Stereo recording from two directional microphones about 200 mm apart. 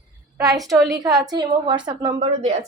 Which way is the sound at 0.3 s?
15° right (ahead or behind).